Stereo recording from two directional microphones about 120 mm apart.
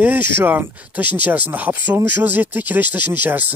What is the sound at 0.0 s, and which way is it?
Speech, 15° right (ahead or behind).